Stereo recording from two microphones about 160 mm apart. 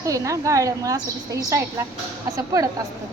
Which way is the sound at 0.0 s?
20° right (ahead or behind).